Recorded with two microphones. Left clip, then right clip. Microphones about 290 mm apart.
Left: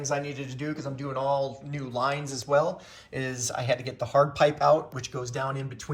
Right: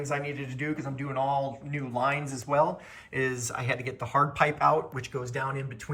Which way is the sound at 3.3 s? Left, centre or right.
Centre.